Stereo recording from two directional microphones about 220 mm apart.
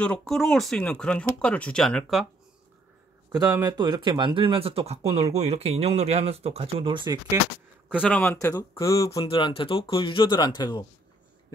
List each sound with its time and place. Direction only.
0.0 s speech: 5° left (ahead or behind)
3.3 s speech: 15° right (ahead or behind)
8.0 s speech: 5° left (ahead or behind)